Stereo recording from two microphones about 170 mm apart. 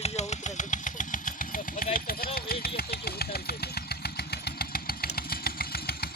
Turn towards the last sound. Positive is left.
turn(degrees=65)  # may be behind; listen again after turning